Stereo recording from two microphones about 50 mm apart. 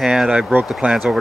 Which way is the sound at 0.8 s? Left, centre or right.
Right.